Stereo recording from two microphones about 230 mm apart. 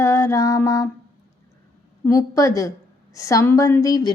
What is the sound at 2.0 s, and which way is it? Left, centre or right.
Female singing, centre.